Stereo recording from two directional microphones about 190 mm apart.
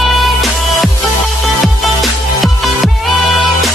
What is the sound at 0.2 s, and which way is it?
Music, centre (ahead or behind).